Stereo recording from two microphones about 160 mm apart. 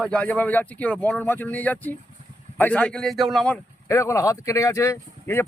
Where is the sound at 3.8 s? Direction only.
15° left (ahead or behind).